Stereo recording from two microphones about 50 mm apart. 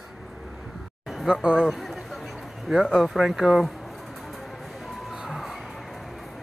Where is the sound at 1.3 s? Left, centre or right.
Centre.